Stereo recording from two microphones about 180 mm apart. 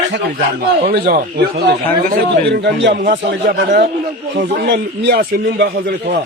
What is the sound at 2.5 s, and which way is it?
Speech, 75° right (ahead or behind).